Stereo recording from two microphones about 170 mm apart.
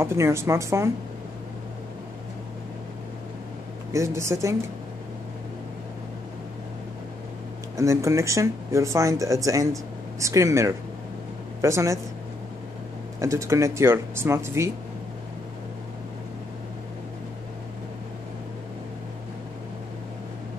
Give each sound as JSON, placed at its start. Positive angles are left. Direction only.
{"t": 0.0, "sound": "speech", "side_deg": -15}
{"t": 3.9, "sound": "speech", "side_deg": -15}
{"t": 7.7, "sound": "speech", "side_deg": -20}
{"t": 13.2, "sound": "speech", "side_deg": -20}